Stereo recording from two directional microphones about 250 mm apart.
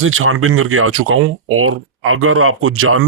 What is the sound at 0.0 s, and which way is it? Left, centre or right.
Speech, right.